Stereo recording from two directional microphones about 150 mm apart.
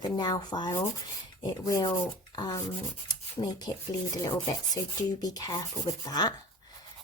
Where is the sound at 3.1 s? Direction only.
30° left (ahead or behind).